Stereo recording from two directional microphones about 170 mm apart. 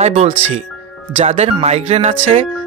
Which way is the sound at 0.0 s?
35° right (ahead or behind).